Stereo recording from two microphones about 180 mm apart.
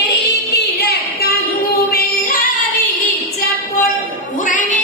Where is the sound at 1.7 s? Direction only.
50° left (ahead or behind).